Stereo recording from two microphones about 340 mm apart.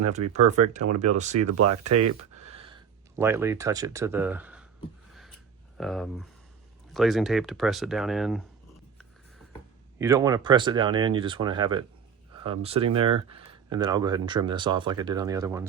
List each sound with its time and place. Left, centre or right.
0.3 s speech: right
1.4 s speech: right
2.4 s a sound: centre
5.7 s speech: centre
10.0 s speech: centre